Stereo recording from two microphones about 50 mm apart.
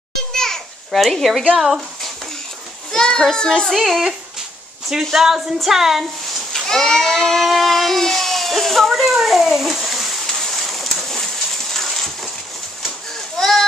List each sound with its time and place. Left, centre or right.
0.3 s children playing: centre
2.9 s a child's voice: centre
3.7 s a woman's voice: centre
6.5 s a sound: centre
13.4 s children playing: centre